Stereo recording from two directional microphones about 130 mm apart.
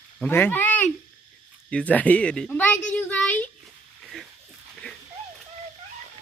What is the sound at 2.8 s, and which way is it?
Child singing, 10° left (ahead or behind).